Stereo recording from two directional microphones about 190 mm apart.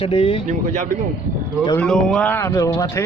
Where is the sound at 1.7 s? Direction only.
5° left (ahead or behind).